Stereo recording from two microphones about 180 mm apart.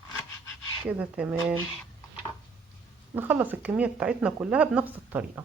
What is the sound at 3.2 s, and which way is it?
Speech, 10° right (ahead or behind).